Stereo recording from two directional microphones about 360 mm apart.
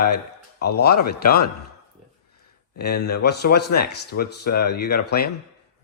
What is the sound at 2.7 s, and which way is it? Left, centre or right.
A man's voice, left.